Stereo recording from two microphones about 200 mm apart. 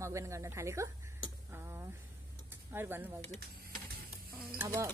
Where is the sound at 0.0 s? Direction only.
15° right (ahead or behind).